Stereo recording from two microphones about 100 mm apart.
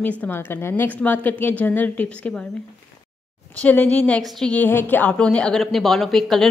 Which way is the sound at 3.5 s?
15° left (ahead or behind).